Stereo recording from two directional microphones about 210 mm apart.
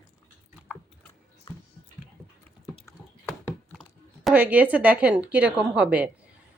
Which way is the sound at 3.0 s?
15° left (ahead or behind).